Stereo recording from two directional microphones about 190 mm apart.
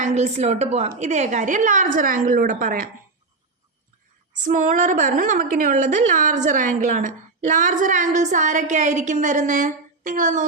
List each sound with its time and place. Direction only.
0.0 s a woman's voice: 35° right (ahead or behind)
4.4 s a woman's voice: 45° right (ahead or behind)